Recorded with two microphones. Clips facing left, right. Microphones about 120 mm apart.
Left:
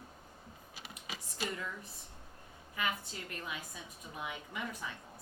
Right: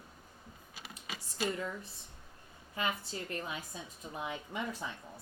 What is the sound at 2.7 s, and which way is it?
A woman's voice, 30° right (ahead or behind).